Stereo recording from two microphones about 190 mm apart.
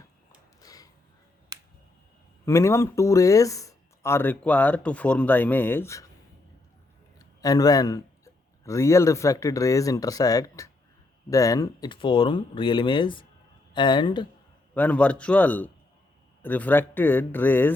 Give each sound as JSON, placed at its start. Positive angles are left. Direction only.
{"t": 0.6, "sound": "a sound", "side_deg": 20}
{"t": 1.5, "sound": "finger snapping", "side_deg": -20}
{"t": 2.5, "sound": "speech", "side_deg": 15}
{"t": 7.2, "sound": "a man's voice", "side_deg": 20}
{"t": 14.7, "sound": "speech", "side_deg": 10}